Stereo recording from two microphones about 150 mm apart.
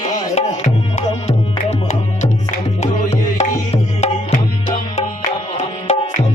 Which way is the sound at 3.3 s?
45° left (ahead or behind).